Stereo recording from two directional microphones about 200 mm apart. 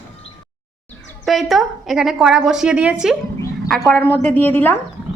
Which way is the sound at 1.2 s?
Centre (ahead or behind).